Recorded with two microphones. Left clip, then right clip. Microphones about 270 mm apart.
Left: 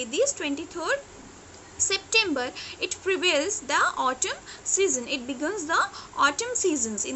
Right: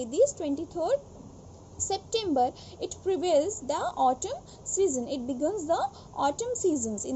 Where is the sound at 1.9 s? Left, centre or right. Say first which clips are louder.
Left 2 dB; left.